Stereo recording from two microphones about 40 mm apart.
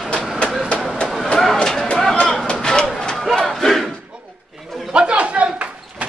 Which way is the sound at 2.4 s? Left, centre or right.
Centre.